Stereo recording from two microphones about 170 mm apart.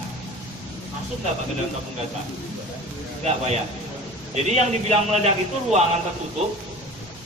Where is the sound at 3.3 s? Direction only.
40° right (ahead or behind).